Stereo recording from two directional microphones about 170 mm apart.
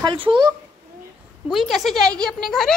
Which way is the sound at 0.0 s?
30° right (ahead or behind).